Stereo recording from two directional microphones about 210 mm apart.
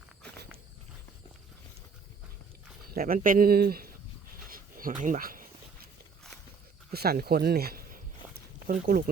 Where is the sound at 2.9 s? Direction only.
45° right (ahead or behind).